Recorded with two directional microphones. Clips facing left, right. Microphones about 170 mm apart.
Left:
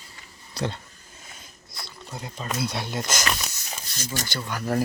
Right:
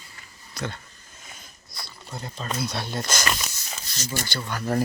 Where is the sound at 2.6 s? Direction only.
15° left (ahead or behind).